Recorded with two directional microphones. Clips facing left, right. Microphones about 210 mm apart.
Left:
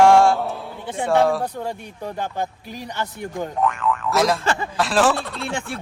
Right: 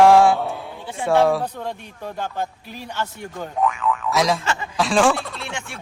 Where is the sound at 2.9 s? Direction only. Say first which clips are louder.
Left 1 dB; 15° left (ahead or behind).